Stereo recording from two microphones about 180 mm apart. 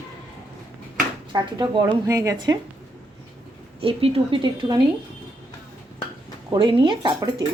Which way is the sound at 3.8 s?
30° right (ahead or behind).